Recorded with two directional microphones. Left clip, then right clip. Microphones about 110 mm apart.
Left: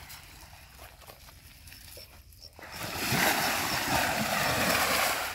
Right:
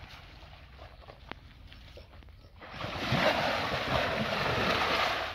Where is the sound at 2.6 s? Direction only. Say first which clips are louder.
Left 1 dB; 35° right (ahead or behind).